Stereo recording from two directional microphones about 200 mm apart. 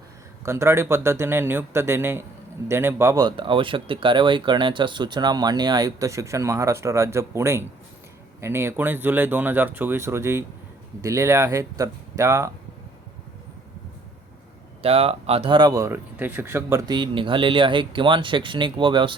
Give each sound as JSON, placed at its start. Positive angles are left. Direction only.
{"t": 0.4, "sound": "speech", "side_deg": -15}
{"t": 14.8, "sound": "speech", "side_deg": -30}